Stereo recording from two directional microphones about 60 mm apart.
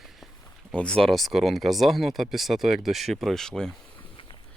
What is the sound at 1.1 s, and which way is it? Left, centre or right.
Speech, centre.